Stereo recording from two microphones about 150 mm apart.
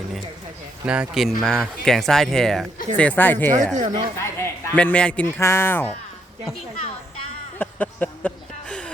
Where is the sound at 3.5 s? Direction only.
55° right (ahead or behind).